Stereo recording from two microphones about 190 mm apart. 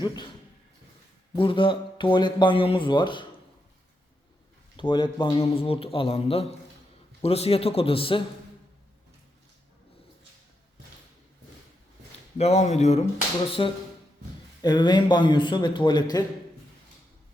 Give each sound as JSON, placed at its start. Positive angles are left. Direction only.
{"t": 1.4, "sound": "speech", "side_deg": 25}
{"t": 4.8, "sound": "a man's voice", "side_deg": 25}
{"t": 12.4, "sound": "a man's voice", "side_deg": 35}
{"t": 13.6, "sound": "speech", "side_deg": 25}